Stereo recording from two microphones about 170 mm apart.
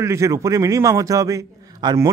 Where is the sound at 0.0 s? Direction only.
15° right (ahead or behind).